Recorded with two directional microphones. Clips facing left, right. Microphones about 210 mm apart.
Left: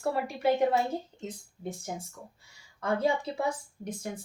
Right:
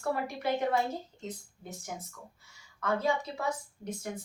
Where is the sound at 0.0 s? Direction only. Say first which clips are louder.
Left 4 dB; 30° left (ahead or behind).